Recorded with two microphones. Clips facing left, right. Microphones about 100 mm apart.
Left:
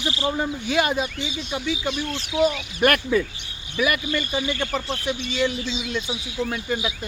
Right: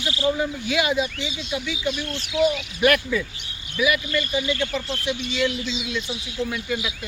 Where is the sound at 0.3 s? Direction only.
45° left (ahead or behind).